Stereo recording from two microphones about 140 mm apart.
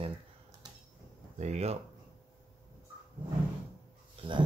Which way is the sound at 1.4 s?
50° right (ahead or behind).